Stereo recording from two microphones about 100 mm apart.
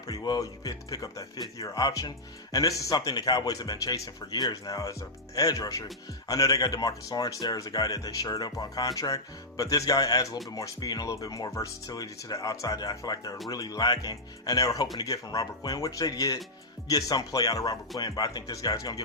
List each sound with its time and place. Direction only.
0.1 s speech: 40° left (ahead or behind)